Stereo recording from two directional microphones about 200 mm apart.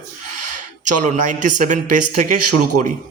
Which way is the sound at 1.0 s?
40° right (ahead or behind).